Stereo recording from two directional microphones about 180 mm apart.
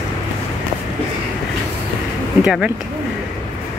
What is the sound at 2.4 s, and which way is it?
Speech, 5° right (ahead or behind).